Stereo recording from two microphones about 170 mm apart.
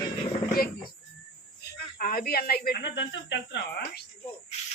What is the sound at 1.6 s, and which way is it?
Speech, 60° left (ahead or behind).